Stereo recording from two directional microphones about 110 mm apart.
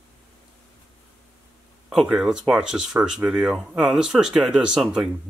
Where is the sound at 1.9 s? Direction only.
5° right (ahead or behind).